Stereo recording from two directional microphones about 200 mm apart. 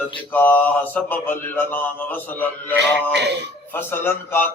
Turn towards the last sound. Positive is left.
turn(degrees=10)  # may be behind; listen again after turning